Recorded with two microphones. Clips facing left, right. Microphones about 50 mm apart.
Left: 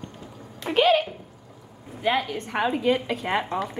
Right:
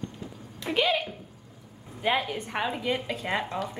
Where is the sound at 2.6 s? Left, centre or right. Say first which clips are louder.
Left 7 dB; left.